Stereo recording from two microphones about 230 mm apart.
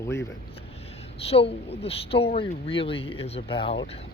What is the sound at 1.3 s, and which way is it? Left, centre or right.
Speech, left.